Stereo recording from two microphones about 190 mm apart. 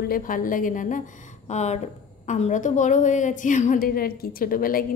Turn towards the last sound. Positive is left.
turn(degrees=50)  # may be behind; listen again after turning